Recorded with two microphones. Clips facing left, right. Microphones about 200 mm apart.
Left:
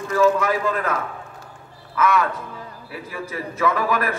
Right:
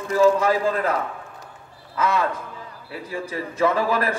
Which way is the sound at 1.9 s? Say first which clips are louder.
Left 2 dB; 30° right (ahead or behind).